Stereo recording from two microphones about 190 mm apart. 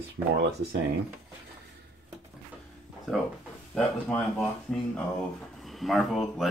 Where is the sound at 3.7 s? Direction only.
10° left (ahead or behind).